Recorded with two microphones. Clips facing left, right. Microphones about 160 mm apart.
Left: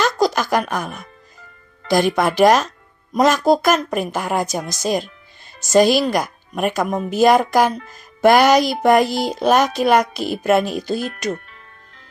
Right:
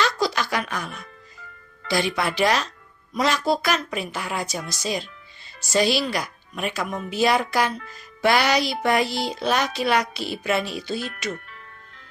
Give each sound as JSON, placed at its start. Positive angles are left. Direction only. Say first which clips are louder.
{"t": 0.0, "sound": "music", "louder": "left 6 dB", "side_deg": 45}
{"t": 1.9, "sound": "speech", "louder": "left 7 dB", "side_deg": 45}